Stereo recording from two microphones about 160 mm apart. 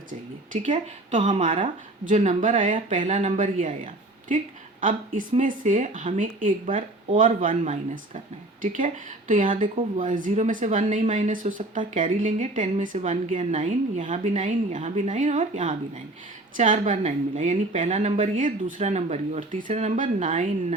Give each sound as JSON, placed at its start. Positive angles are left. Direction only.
{"t": 0.5, "sound": "a woman's voice", "side_deg": -40}